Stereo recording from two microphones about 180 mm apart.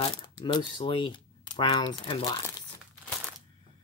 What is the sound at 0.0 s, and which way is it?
Speech, 25° left (ahead or behind).